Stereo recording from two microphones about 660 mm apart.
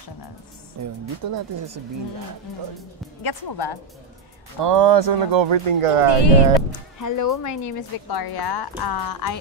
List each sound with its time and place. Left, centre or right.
0.8 s speech: right
3.2 s speech: left
4.6 s speech: right
6.0 s speech: left
7.0 s speech: left